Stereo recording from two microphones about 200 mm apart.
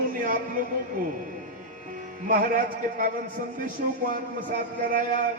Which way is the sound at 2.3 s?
45° right (ahead or behind).